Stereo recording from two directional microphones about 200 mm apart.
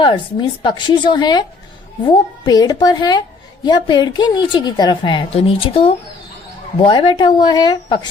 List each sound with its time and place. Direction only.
0.0 s a woman's voice: 25° left (ahead or behind)